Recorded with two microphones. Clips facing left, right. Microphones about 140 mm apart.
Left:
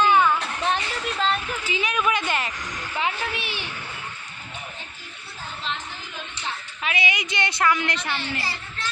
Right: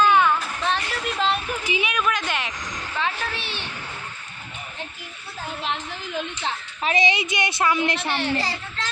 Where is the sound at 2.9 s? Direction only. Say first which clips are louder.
Even; 20° left (ahead or behind).